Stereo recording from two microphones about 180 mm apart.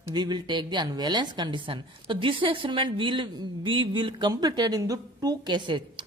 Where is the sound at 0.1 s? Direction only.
25° right (ahead or behind).